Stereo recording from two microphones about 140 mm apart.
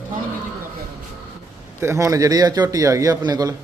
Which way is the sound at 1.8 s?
20° right (ahead or behind).